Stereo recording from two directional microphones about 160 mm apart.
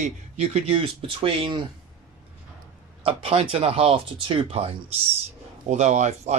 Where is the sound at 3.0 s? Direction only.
35° right (ahead or behind).